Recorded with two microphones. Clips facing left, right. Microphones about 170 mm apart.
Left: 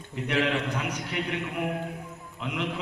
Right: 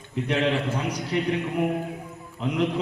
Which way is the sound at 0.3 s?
35° right (ahead or behind).